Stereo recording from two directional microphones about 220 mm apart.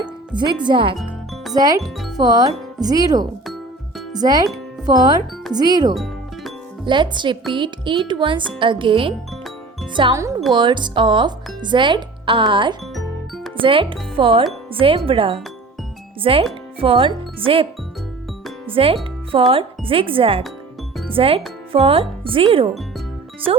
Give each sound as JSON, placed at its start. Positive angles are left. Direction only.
{"t": 0.3, "sound": "speech", "side_deg": -20}
{"t": 0.9, "sound": "music", "side_deg": 0}
{"t": 1.5, "sound": "speech", "side_deg": -15}
{"t": 1.8, "sound": "speech", "side_deg": 0}
{"t": 2.1, "sound": "speech", "side_deg": -15}
{"t": 3.4, "sound": "music", "side_deg": 0}
{"t": 4.1, "sound": "speech", "side_deg": -15}
{"t": 5.9, "sound": "music", "side_deg": 0}
{"t": 6.8, "sound": "speech", "side_deg": -20}
{"t": 12.9, "sound": "music", "side_deg": 0}
{"t": 13.6, "sound": "speech", "side_deg": -25}